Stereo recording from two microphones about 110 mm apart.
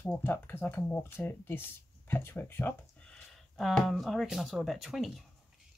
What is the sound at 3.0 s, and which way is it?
Speech, 5° left (ahead or behind).